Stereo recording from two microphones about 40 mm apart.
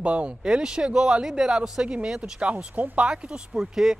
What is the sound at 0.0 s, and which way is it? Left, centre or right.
Speech, right.